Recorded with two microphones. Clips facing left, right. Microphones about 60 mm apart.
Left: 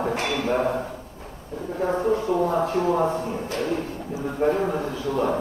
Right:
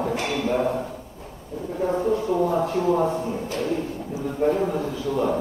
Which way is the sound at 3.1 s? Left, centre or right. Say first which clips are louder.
Even; left.